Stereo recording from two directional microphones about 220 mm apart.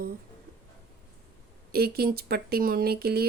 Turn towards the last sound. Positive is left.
turn(degrees=-45)  # may be behind; listen again after turning